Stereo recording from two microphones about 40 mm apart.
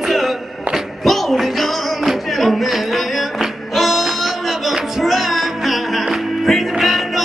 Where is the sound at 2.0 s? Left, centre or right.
Centre.